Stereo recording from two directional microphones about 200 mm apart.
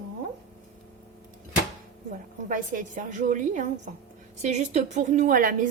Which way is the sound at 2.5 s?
40° right (ahead or behind).